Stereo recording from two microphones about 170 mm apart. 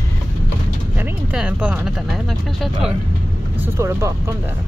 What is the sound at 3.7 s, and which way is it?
Speech, 15° right (ahead or behind).